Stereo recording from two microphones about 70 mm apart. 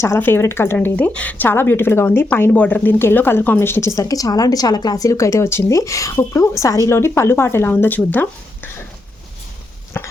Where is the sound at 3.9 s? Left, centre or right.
Left.